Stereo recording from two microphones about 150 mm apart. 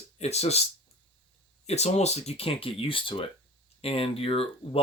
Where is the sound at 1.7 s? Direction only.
45° left (ahead or behind).